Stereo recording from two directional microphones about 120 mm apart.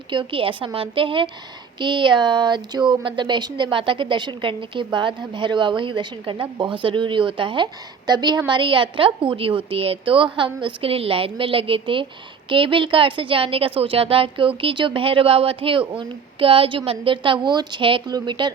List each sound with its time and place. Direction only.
0.1 s a woman's voice: 45° right (ahead or behind)